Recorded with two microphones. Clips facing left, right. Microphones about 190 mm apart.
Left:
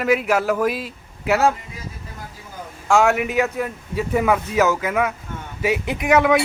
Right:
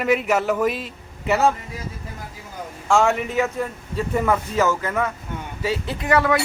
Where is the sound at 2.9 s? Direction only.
5° left (ahead or behind).